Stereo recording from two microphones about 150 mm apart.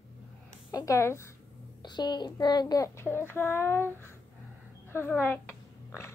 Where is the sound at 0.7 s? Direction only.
20° left (ahead or behind).